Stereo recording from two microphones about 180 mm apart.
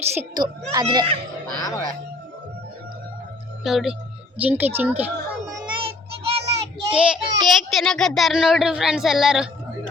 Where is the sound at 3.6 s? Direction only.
Centre (ahead or behind).